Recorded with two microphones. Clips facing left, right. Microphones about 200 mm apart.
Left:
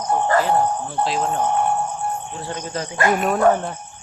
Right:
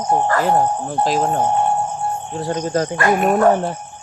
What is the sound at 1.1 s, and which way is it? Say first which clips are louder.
Music: right 4 dB; 40° right (ahead or behind).